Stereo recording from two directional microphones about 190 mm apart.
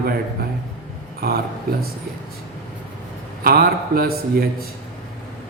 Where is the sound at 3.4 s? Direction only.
50° right (ahead or behind).